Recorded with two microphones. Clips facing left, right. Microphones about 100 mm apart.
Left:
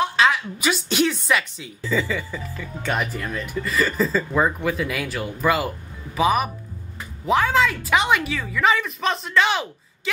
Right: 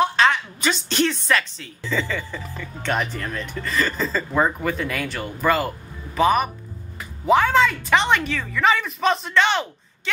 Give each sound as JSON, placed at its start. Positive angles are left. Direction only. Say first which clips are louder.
{"t": 0.0, "sound": "a woman's voice", "louder": "right 1 dB", "side_deg": 5}